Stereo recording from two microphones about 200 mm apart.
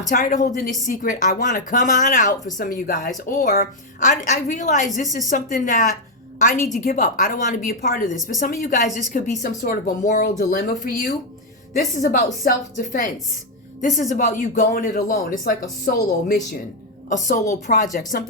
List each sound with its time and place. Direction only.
0.1 s a woman's voice: 40° left (ahead or behind)
18.1 s a woman's voice: 50° left (ahead or behind)